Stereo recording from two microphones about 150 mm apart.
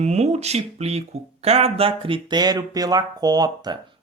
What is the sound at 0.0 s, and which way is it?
Speech, 45° right (ahead or behind).